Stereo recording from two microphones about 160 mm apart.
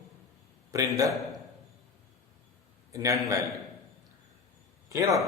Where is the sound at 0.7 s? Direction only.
20° right (ahead or behind).